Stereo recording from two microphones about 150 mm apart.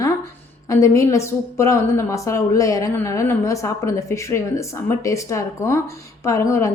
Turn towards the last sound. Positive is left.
turn(degrees=20)  # may be behind; listen again after turning